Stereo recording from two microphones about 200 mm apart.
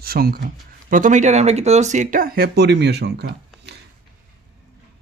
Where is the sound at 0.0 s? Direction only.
50° right (ahead or behind).